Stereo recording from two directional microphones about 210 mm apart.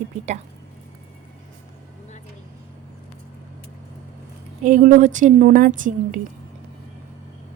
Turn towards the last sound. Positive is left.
turn(degrees=-40)  # may be behind; listen again after turning